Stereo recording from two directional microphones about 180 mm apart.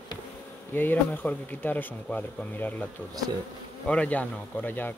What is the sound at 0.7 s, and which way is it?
Speech, 10° left (ahead or behind).